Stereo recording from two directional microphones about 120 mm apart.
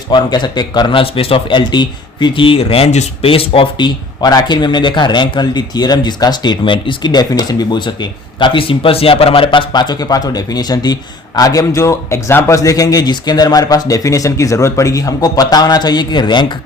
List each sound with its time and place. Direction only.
0.1 s a man's voice: 40° left (ahead or behind)